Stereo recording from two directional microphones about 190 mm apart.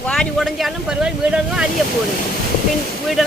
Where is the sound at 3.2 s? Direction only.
Centre (ahead or behind).